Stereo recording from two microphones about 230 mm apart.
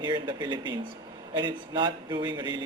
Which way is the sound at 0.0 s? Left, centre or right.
Centre.